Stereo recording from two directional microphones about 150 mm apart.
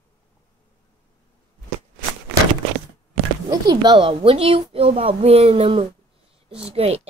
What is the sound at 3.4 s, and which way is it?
Speech, 25° right (ahead or behind).